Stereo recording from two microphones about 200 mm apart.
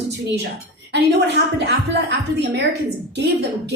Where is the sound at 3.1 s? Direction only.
60° right (ahead or behind).